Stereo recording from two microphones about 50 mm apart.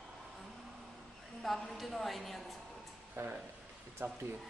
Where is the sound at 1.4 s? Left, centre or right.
Centre.